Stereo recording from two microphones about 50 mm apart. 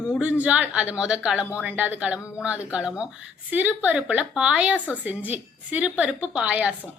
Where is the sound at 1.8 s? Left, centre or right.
Right.